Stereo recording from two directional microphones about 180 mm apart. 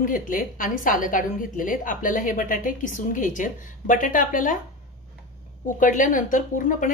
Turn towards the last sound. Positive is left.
turn(degrees=45)  # may be behind; listen again after turning